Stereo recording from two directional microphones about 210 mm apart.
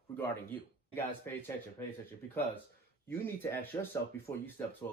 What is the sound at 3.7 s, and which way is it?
Speech, 15° left (ahead or behind).